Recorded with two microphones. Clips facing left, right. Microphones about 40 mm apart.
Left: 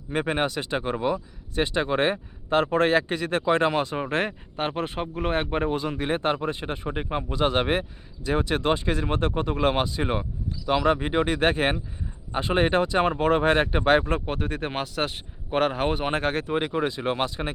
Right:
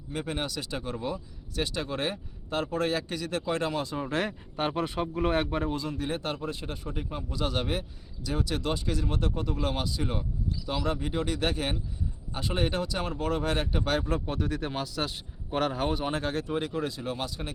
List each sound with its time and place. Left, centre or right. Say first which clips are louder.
0.1 s speech: left 8 dB; left